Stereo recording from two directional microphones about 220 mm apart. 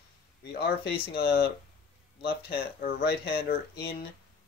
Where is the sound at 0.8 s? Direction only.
45° left (ahead or behind).